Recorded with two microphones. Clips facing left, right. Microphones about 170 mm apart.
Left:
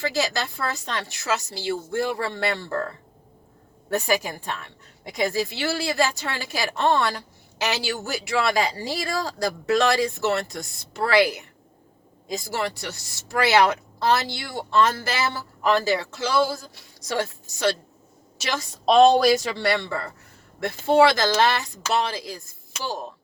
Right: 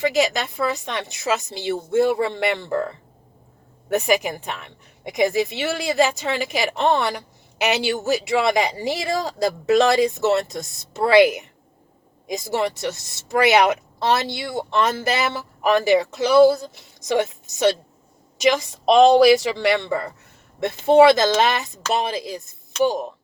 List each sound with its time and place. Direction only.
0.0 s speech: 20° right (ahead or behind)
19.5 s speech: 15° right (ahead or behind)